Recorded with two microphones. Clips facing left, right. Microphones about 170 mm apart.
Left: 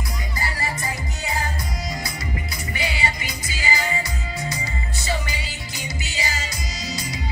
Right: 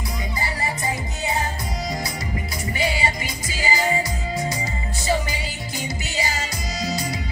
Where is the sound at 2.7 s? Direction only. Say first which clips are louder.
Right 3 dB; 40° right (ahead or behind).